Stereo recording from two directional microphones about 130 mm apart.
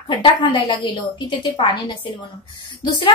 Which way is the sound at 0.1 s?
40° left (ahead or behind).